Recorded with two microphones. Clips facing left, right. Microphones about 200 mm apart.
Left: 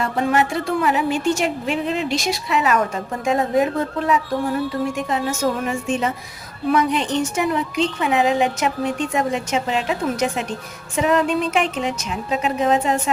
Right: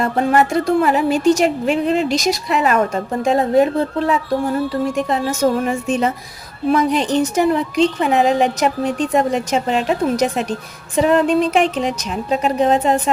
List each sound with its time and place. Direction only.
0.0 s speech: 45° right (ahead or behind)